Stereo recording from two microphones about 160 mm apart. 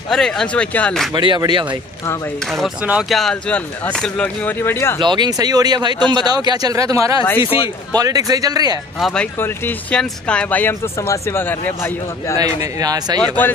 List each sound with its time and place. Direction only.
0.1 s speech: 5° left (ahead or behind)
1.1 s speech: 30° right (ahead or behind)
2.4 s speech: centre (ahead or behind)
5.0 s speech: 25° right (ahead or behind)
7.3 s a man's voice: 35° left (ahead or behind)
7.9 s speech: 25° right (ahead or behind)
9.0 s speech: 5° left (ahead or behind)
12.4 s speech: 20° right (ahead or behind)